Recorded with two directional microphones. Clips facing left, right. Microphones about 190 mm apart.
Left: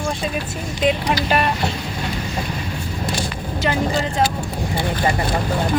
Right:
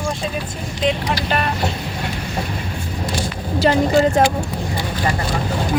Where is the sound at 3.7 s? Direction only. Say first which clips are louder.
Right 6 dB; 35° right (ahead or behind).